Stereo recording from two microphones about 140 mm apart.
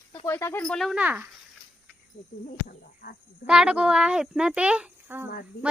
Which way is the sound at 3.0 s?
85° left.